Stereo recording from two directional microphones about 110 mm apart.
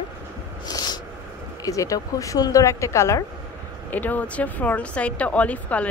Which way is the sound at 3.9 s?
15° left (ahead or behind).